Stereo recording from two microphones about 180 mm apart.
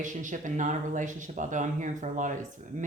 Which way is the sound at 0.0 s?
45° right (ahead or behind).